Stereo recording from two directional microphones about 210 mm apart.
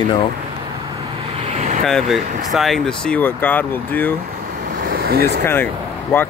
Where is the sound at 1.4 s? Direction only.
30° right (ahead or behind).